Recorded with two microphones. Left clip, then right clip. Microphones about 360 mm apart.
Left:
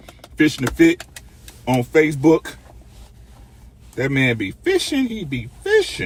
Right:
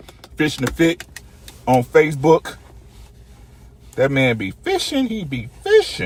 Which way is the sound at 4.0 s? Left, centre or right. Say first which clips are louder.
Right 3 dB; centre.